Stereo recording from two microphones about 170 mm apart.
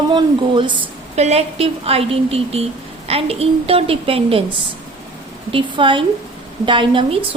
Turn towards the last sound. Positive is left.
turn(degrees=-30)  # may be behind; listen again after turning